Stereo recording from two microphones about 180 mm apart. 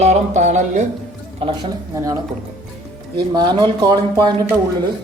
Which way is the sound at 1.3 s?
30° right (ahead or behind).